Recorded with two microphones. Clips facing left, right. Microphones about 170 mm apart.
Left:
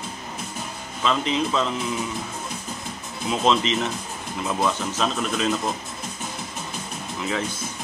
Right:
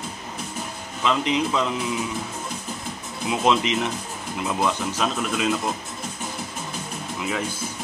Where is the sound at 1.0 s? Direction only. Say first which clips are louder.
Right 1 dB; 15° right (ahead or behind).